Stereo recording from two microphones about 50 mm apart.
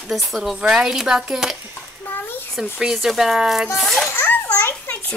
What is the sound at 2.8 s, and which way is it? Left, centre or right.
A child's voice, centre.